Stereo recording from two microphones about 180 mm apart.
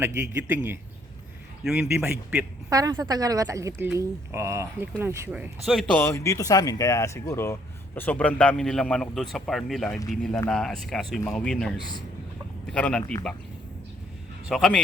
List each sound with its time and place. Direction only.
0.0 s a woman's voice: 10° right (ahead or behind)
5.6 s speech: centre (ahead or behind)
6.0 s speech: 15° left (ahead or behind)
11.8 s a man's voice: 25° left (ahead or behind)
12.7 s speech: 5° left (ahead or behind)
14.4 s speech: centre (ahead or behind)